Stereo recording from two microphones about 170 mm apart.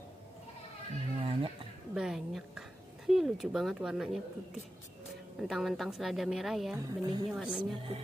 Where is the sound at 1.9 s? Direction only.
5° right (ahead or behind).